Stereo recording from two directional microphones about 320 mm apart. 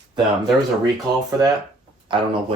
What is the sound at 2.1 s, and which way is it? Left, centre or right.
Speech, centre.